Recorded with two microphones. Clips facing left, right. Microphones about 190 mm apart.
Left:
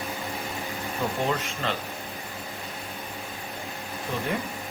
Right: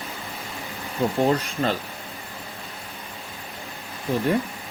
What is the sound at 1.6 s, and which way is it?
Speech, 40° right (ahead or behind).